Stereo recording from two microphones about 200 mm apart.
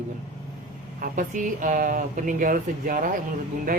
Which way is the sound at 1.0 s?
40° right (ahead or behind).